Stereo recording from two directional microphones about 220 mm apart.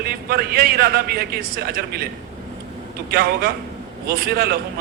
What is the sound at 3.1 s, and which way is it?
A man's voice, 45° right (ahead or behind).